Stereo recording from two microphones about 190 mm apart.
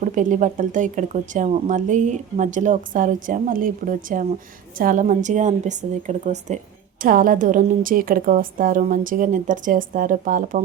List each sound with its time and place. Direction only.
0.0 s a woman's voice: 40° right (ahead or behind)